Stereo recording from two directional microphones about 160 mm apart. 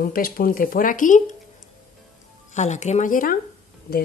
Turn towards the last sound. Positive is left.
turn(degrees=70)  # may be behind; listen again after turning